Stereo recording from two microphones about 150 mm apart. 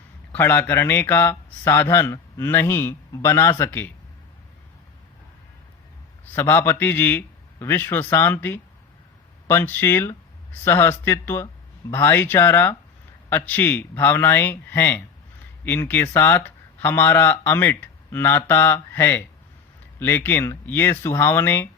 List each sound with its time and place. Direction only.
0.3 s speech: 15° left (ahead or behind)
6.2 s speech: 15° left (ahead or behind)